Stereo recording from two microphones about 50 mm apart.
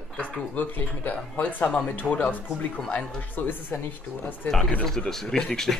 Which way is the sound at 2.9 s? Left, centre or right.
Left.